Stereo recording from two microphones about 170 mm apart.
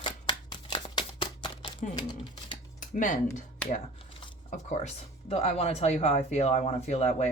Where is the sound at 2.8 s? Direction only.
50° left (ahead or behind).